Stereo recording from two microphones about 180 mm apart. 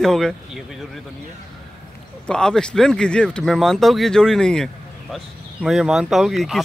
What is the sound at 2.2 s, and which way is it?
Speech, 5° left (ahead or behind).